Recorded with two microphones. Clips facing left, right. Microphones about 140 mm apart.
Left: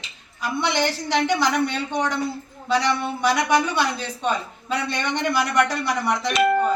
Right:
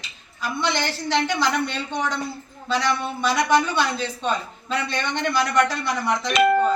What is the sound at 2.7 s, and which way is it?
A woman's voice, 10° left (ahead or behind).